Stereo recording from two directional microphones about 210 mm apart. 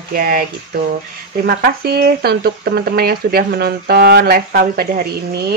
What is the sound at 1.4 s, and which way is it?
Speech, 50° right (ahead or behind).